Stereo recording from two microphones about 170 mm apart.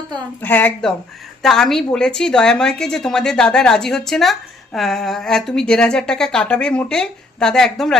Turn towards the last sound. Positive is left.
turn(degrees=0)  # may be behind; listen again after turning